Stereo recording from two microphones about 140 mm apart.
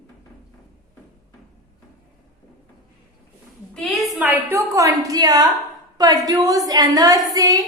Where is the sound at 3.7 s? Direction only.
Centre (ahead or behind).